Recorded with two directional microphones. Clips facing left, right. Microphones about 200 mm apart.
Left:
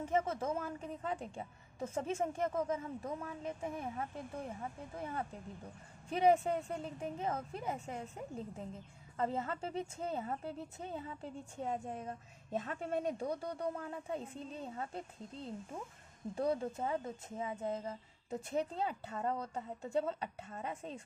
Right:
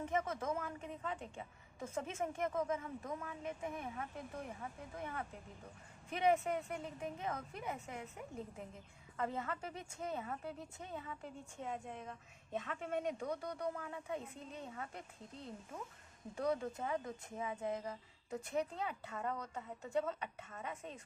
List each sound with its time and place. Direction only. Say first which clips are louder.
0.0 s a woman's voice: left 4 dB; 30° left (ahead or behind)